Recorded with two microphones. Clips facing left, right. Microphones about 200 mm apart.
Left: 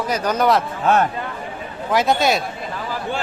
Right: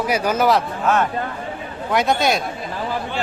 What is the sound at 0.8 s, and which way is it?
Speech, 35° left (ahead or behind).